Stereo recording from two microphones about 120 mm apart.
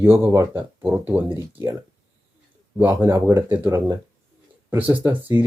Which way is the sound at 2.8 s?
15° right (ahead or behind).